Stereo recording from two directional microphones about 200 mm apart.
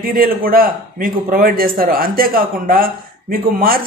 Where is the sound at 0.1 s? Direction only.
45° right (ahead or behind).